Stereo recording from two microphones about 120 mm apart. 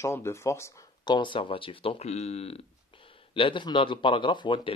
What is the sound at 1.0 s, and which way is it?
Speech, 40° left (ahead or behind).